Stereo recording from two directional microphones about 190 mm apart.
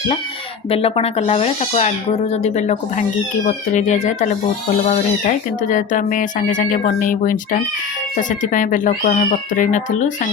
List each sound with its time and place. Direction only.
0.7 s speech: 30° left (ahead or behind)